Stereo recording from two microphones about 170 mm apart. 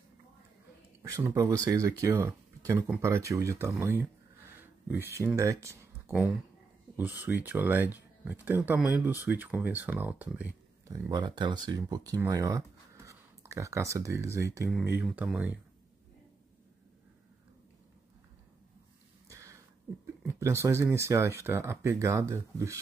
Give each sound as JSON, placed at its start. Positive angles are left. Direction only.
{"t": 1.0, "sound": "speech", "side_deg": -20}
{"t": 10.9, "sound": "speech", "side_deg": -25}
{"t": 19.2, "sound": "a sound", "side_deg": -20}
{"t": 20.2, "sound": "speech", "side_deg": -15}